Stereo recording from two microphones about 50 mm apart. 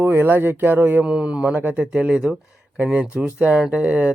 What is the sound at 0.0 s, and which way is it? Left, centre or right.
Speech, right.